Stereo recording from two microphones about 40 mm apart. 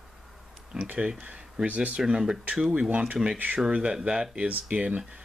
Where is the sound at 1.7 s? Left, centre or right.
Right.